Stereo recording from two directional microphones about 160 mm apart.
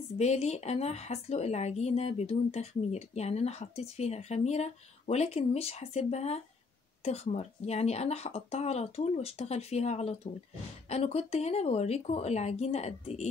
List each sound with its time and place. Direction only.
0.2 s a woman's voice: 45° left (ahead or behind)